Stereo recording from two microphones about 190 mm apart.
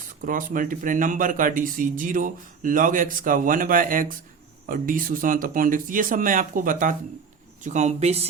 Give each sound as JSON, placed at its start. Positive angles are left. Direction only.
{"t": 0.3, "sound": "speech", "side_deg": -45}